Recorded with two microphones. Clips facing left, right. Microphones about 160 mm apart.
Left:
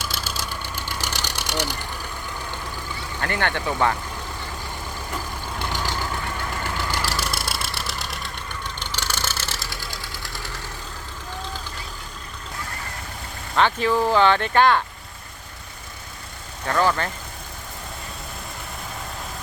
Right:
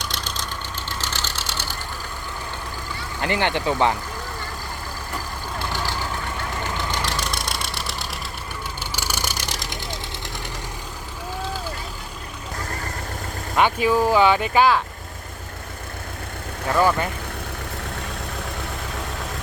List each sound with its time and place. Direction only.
0.0 s vehicle: 5° left (ahead or behind)
3.2 s speech: 20° right (ahead or behind)
6.9 s vehicle: 5° left (ahead or behind)
8.8 s vehicle: 10° right (ahead or behind)
13.6 s speech: 10° right (ahead or behind)
16.6 s speech: 10° right (ahead or behind)